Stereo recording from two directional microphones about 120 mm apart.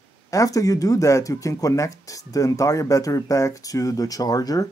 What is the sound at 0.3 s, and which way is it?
Speech, 25° left (ahead or behind).